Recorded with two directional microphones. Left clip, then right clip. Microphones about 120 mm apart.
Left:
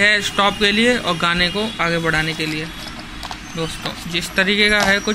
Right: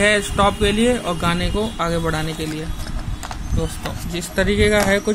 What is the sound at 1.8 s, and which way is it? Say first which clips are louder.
Speech: left 6 dB; 25° right (ahead or behind).